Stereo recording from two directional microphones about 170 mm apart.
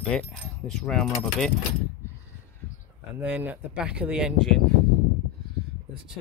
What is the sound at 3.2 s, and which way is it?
Speech, 10° right (ahead or behind).